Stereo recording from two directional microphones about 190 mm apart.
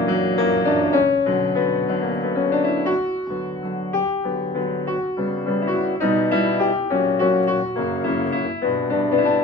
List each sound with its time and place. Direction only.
0.9 s music: 15° left (ahead or behind)
5.5 s music: 15° left (ahead or behind)